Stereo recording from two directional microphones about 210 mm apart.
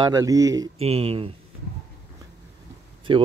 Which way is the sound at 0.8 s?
30° right (ahead or behind).